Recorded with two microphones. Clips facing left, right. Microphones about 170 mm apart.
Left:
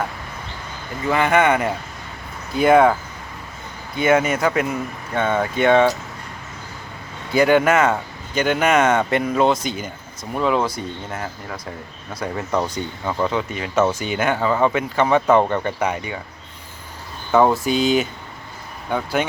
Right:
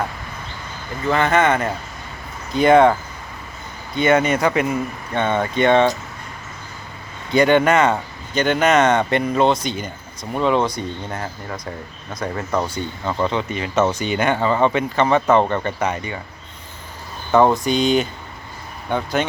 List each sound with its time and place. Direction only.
1.0 s speech: 10° left (ahead or behind)
3.9 s speech: 5° left (ahead or behind)
7.3 s speech: 5° left (ahead or behind)
13.1 s speech: 5° left (ahead or behind)
17.3 s speech: 5° left (ahead or behind)